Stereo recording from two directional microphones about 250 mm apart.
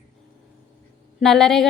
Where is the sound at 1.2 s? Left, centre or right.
Centre.